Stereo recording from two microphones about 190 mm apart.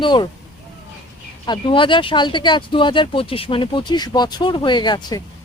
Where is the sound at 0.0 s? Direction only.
25° left (ahead or behind).